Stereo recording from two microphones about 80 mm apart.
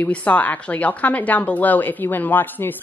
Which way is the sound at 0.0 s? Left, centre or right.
Centre.